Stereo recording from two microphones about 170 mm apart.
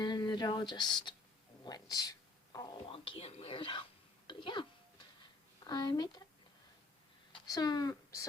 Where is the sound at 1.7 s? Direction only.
25° left (ahead or behind).